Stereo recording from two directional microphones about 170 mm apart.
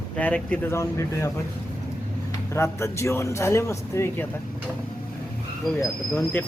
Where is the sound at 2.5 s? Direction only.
15° left (ahead or behind).